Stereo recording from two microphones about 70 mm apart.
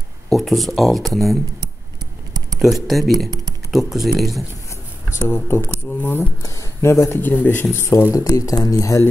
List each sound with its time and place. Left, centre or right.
0.3 s speech: centre
2.6 s speech: centre
5.3 s speech: left
6.4 s speech: left
7.2 s a man's voice: left
8.1 s speech: left